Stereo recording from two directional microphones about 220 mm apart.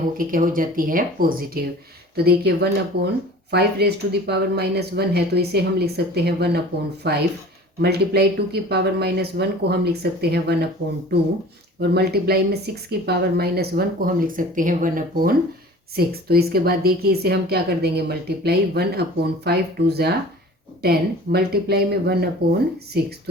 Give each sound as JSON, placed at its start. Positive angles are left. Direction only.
{"t": 0.2, "sound": "speech", "side_deg": -40}
{"t": 11.8, "sound": "speech", "side_deg": -45}